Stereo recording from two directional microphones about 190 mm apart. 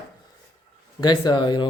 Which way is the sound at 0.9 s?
25° left (ahead or behind).